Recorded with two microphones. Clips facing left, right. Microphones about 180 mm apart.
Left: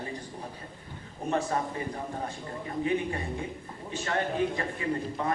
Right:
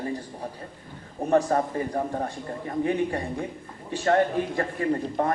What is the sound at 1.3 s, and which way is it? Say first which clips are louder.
A man's voice: right 7 dB; 40° right (ahead or behind).